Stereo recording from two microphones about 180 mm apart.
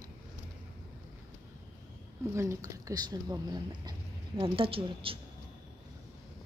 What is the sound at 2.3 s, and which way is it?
A woman's voice, 15° right (ahead or behind).